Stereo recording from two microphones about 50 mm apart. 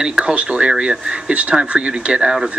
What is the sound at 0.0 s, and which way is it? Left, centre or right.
Speech, centre.